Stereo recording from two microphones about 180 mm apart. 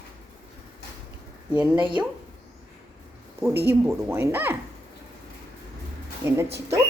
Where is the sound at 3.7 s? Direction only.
15° right (ahead or behind).